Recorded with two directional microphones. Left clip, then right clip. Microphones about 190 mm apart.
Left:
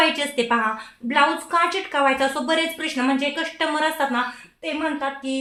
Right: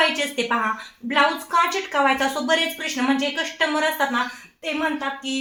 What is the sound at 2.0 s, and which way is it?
Speech, 30° left (ahead or behind).